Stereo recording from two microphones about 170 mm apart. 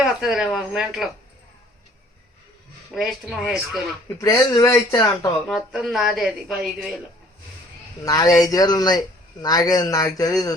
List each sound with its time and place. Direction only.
0.0 s speech: 5° right (ahead or behind)
2.9 s speech: centre (ahead or behind)
4.2 s speech: 20° left (ahead or behind)
5.5 s speech: centre (ahead or behind)
8.0 s speech: 20° left (ahead or behind)